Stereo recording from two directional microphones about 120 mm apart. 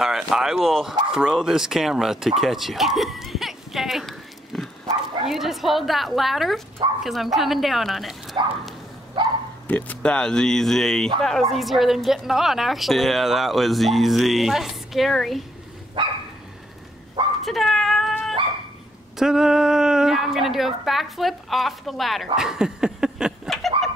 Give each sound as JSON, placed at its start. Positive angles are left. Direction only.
{"t": 0.0, "sound": "a woman's voice", "side_deg": -5}
{"t": 9.7, "sound": "a woman's voice", "side_deg": 10}
{"t": 16.0, "sound": "dog", "side_deg": -40}
{"t": 17.4, "sound": "dog", "side_deg": 0}
{"t": 19.1, "sound": "a woman's voice", "side_deg": -5}